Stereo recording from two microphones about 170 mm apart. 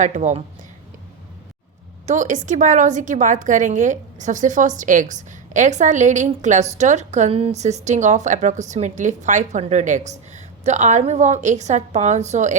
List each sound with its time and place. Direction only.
0.0 s a woman's voice: 45° right (ahead or behind)
2.0 s a woman's voice: 45° right (ahead or behind)